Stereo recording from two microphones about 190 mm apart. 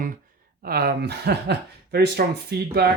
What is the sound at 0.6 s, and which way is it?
Speech, 55° right (ahead or behind).